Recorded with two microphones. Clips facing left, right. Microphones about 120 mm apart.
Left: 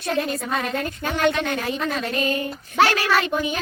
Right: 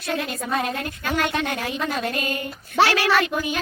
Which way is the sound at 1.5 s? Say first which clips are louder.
Left 2 dB; 30° left (ahead or behind).